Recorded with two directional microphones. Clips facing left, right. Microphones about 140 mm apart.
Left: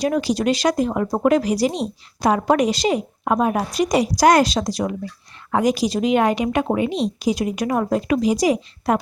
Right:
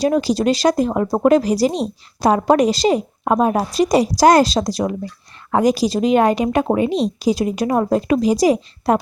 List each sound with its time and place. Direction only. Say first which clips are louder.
0.0 s speech: right 3 dB; 35° right (ahead or behind)